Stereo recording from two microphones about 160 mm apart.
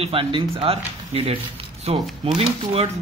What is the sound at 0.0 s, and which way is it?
Speech, 35° right (ahead or behind).